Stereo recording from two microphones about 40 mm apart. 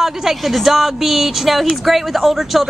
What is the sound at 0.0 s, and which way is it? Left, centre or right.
Speech, centre.